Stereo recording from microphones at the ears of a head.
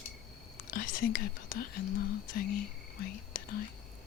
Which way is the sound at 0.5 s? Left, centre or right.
Left.